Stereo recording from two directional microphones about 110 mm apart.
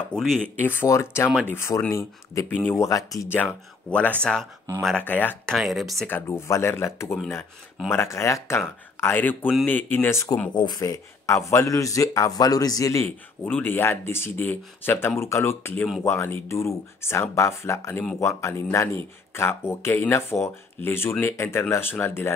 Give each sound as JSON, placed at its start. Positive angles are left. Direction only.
{"t": 0.1, "sound": "speech", "side_deg": 5}
{"t": 0.6, "sound": "speech", "side_deg": 20}
{"t": 3.3, "sound": "speech", "side_deg": 15}
{"t": 5.6, "sound": "speech", "side_deg": 0}
{"t": 6.0, "sound": "speech", "side_deg": 20}
{"t": 10.5, "sound": "speech", "side_deg": 45}
{"t": 10.8, "sound": "speech", "side_deg": 30}
{"t": 13.0, "sound": "speech", "side_deg": 15}